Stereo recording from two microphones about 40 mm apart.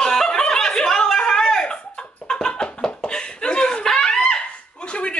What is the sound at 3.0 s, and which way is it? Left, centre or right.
Laughter, left.